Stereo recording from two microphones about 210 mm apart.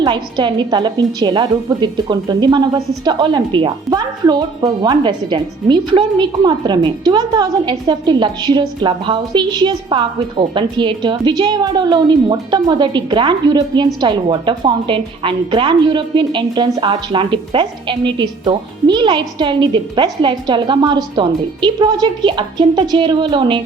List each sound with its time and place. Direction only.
0.0 s a woman's voice: 20° right (ahead or behind)